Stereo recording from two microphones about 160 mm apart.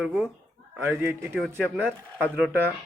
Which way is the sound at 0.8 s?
15° right (ahead or behind).